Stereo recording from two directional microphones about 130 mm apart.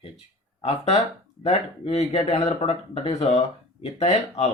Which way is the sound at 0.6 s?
50° left (ahead or behind).